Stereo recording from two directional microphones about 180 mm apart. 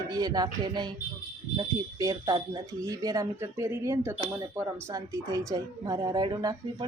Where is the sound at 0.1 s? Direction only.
20° right (ahead or behind).